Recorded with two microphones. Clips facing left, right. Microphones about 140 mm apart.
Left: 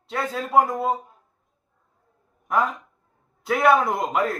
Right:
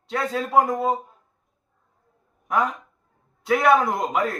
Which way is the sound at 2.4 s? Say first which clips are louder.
Even; centre (ahead or behind).